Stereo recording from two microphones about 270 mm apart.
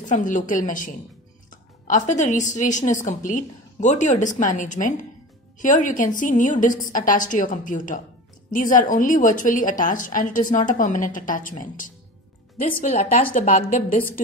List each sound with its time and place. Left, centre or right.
0.1 s speech: left